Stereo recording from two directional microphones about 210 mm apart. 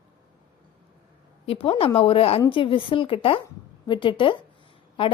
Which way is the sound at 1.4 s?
25° left (ahead or behind).